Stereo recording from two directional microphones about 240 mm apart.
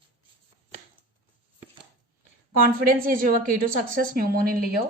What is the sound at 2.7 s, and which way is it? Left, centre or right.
A woman's voice, right.